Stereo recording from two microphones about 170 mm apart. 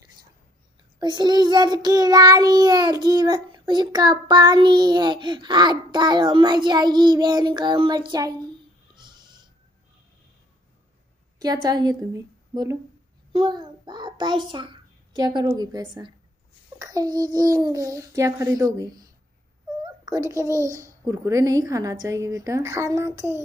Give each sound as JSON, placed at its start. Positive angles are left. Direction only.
{"t": 0.9, "sound": "child singing", "side_deg": -25}
{"t": 8.9, "sound": "pig", "side_deg": -25}
{"t": 11.3, "sound": "a woman's voice", "side_deg": -25}
{"t": 16.7, "sound": "child singing", "side_deg": -20}
{"t": 19.8, "sound": "a child's voice", "side_deg": -20}
{"t": 21.0, "sound": "child singing", "side_deg": -20}